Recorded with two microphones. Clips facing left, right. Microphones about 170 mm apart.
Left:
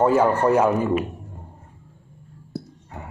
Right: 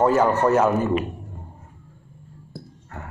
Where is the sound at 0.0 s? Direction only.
10° left (ahead or behind).